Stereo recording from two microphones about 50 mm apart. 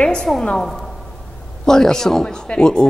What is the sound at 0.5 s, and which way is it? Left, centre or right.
A woman's voice, centre.